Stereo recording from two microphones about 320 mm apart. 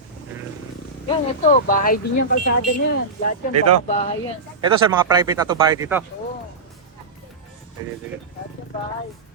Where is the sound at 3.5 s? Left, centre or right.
Right.